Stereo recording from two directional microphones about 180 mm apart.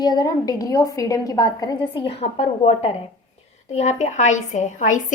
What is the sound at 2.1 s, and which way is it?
A woman's voice, 35° left (ahead or behind).